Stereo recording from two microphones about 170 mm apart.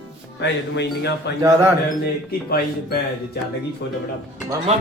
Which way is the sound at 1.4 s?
20° right (ahead or behind).